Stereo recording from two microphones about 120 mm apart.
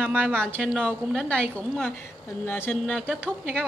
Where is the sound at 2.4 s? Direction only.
20° left (ahead or behind).